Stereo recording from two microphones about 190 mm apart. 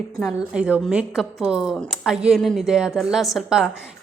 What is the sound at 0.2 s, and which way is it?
A woman's voice, 5° right (ahead or behind).